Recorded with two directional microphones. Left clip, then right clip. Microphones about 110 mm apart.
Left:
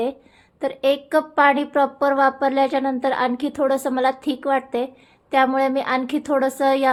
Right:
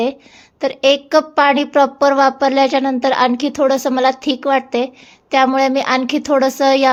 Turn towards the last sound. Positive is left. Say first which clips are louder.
# right 6 dB
turn(degrees=-30)  # may be behind; listen again after turning